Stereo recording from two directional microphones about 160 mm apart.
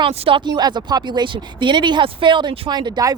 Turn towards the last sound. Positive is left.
turn(degrees=-25)  # may be behind; listen again after turning